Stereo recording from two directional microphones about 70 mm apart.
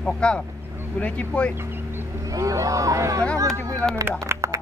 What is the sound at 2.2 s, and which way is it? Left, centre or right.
Speech, right.